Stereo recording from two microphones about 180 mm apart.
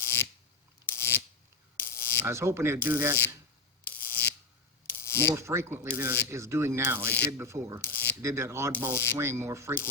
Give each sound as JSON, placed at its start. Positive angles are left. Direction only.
{"t": 0.0, "sound": "a sound", "side_deg": 15}
{"t": 1.7, "sound": "mechanisms", "side_deg": 10}
{"t": 2.2, "sound": "speech", "side_deg": -15}
{"t": 3.8, "sound": "a sound", "side_deg": 10}
{"t": 4.9, "sound": "mechanisms", "side_deg": 15}
{"t": 5.3, "sound": "speech", "side_deg": -15}
{"t": 7.8, "sound": "a sound", "side_deg": 10}
{"t": 8.2, "sound": "speech", "side_deg": -15}
{"t": 8.9, "sound": "speech", "side_deg": 15}
{"t": 9.1, "sound": "speech", "side_deg": -15}